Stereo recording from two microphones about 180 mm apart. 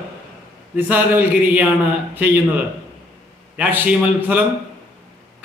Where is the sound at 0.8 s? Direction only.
10° right (ahead or behind).